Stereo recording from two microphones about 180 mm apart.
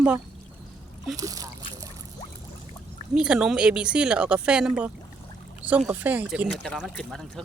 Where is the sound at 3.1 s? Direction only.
5° right (ahead or behind).